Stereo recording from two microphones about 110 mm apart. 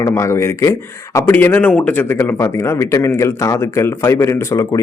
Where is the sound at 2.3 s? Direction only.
30° left (ahead or behind).